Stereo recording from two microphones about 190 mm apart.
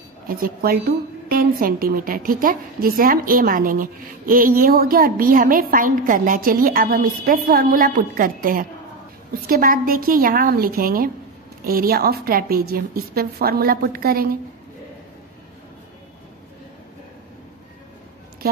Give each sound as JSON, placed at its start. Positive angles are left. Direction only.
{"t": 0.3, "sound": "a woman's voice", "side_deg": -50}